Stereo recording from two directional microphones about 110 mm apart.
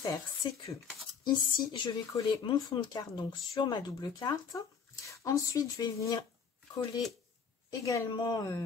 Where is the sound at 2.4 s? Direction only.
45° left (ahead or behind).